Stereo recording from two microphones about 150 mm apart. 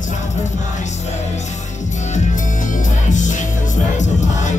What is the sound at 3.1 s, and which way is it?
Music, 55° left (ahead or behind).